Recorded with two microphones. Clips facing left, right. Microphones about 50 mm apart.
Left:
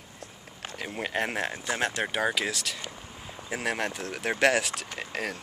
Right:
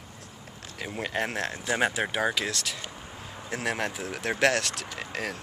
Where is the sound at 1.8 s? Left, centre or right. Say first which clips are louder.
Right 2 dB; centre.